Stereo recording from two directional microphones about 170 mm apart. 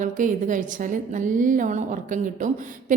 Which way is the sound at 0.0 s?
50° right (ahead or behind).